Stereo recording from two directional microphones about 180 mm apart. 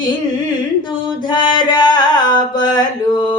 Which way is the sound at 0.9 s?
25° left (ahead or behind).